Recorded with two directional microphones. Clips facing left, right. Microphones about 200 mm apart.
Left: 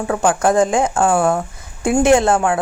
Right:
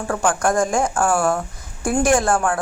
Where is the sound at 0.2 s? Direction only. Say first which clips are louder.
Left 4 dB; 20° left (ahead or behind).